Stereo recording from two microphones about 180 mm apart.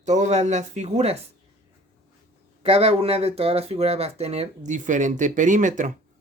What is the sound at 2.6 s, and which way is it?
Speech, 35° right (ahead or behind).